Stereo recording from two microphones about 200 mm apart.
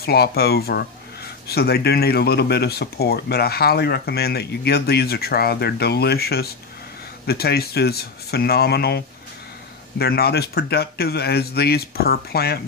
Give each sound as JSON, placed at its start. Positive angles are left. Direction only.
{"t": 0.0, "sound": "speech", "side_deg": 50}